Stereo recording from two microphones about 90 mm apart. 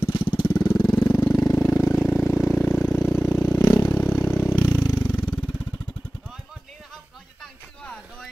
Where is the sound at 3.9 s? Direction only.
20° left (ahead or behind).